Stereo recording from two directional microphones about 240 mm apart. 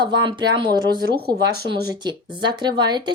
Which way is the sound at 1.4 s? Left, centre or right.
Right.